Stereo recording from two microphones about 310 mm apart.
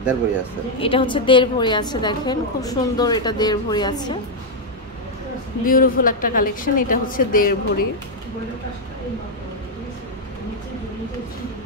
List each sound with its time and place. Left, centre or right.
0.7 s a woman's voice: centre
5.7 s a woman's voice: left